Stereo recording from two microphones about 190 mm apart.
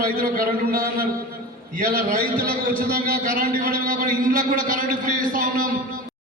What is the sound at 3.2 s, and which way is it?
A man's voice, 45° right (ahead or behind).